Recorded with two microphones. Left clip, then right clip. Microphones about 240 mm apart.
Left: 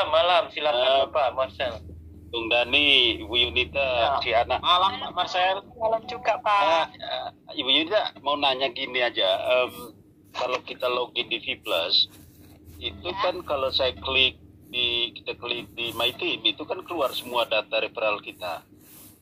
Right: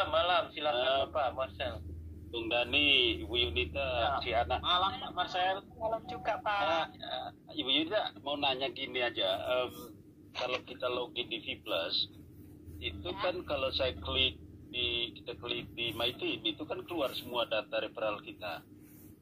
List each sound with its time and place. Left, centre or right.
0.0 s a man's voice: left